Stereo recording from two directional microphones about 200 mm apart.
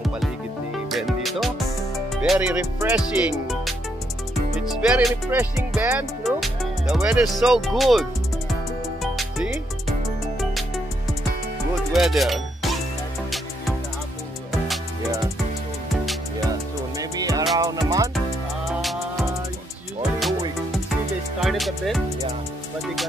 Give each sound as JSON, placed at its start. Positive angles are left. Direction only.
{"t": 0.8, "sound": "music", "side_deg": 0}
{"t": 3.0, "sound": "speech", "side_deg": 0}
{"t": 4.6, "sound": "music", "side_deg": -5}
{"t": 7.1, "sound": "speech", "side_deg": 0}
{"t": 9.0, "sound": "music", "side_deg": 0}
{"t": 11.9, "sound": "music", "side_deg": 0}
{"t": 17.0, "sound": "music", "side_deg": -15}
{"t": 18.7, "sound": "music", "side_deg": 0}
{"t": 20.0, "sound": "music", "side_deg": 0}
{"t": 21.4, "sound": "music", "side_deg": 0}